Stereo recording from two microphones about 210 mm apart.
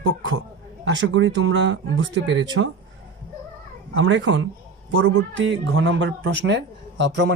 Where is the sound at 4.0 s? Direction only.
65° right (ahead or behind).